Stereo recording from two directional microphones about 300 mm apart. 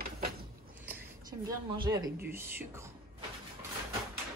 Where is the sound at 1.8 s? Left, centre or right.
Centre.